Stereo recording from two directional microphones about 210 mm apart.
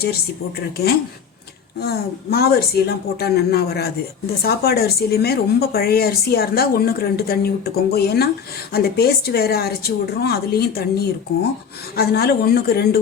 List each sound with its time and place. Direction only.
1.8 s a woman's voice: 50° left (ahead or behind)